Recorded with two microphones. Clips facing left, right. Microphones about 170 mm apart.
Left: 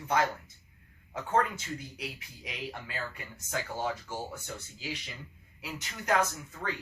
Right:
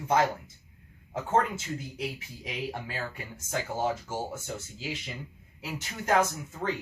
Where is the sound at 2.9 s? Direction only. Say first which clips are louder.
Right 3 dB; 25° right (ahead or behind).